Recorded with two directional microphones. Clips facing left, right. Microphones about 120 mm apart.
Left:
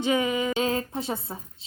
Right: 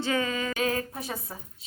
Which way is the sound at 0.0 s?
20° left (ahead or behind).